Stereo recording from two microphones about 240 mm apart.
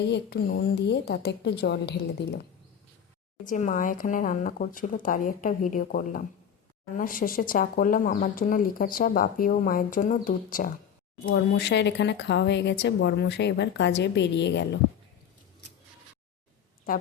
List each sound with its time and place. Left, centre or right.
0.0 s speech: left
3.4 s speech: left
11.3 s speech: left